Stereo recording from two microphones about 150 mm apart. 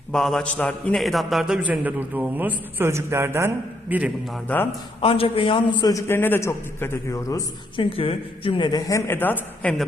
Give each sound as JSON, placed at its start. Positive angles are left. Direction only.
{"t": 0.1, "sound": "a man's voice", "side_deg": 5}
{"t": 4.4, "sound": "a man's voice", "side_deg": 15}
{"t": 4.9, "sound": "a man's voice", "side_deg": 40}
{"t": 7.8, "sound": "a man's voice", "side_deg": 35}